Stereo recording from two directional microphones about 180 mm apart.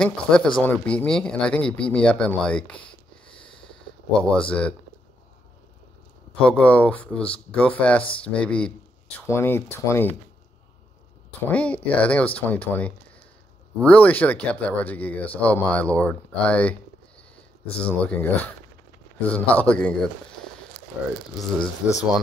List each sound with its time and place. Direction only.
0.0 s speech: 5° left (ahead or behind)
4.2 s speech: 5° left (ahead or behind)
6.4 s speech: 5° left (ahead or behind)
11.4 s speech: 10° left (ahead or behind)
17.7 s speech: 5° left (ahead or behind)